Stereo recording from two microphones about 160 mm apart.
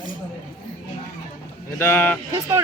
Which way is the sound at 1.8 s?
10° left (ahead or behind).